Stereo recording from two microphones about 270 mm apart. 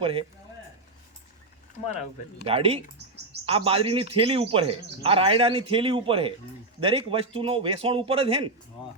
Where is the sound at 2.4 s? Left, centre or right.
Right.